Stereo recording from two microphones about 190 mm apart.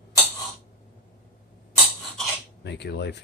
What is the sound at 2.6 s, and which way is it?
Speech, 65° left (ahead or behind).